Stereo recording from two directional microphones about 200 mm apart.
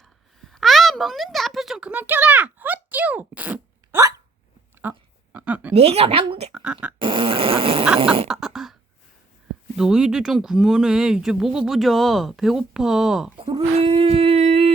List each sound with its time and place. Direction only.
0.0 s a sound: centre (ahead or behind)
5.7 s a woman's voice: 30° right (ahead or behind)
6.5 s speech: 5° right (ahead or behind)
7.0 s dog: 25° right (ahead or behind)
7.9 s a woman's voice: 25° right (ahead or behind)
8.3 s throat clearing: centre (ahead or behind)
9.7 s speech: 5° right (ahead or behind)
13.4 s a sound: 25° right (ahead or behind)